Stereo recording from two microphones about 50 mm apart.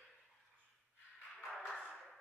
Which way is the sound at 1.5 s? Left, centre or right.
Centre.